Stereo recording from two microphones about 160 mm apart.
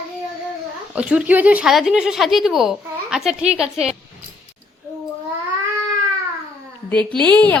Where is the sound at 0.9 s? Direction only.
5° right (ahead or behind).